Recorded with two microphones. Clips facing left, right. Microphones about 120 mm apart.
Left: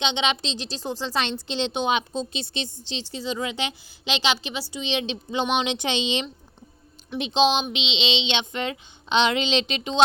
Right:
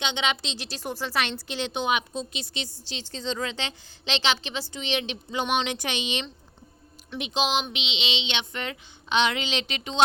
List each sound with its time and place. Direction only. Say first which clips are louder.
0.0 s a woman's voice: left 3 dB; 20° left (ahead or behind)
3.1 s a woman's voice: left 1 dB; 10° left (ahead or behind)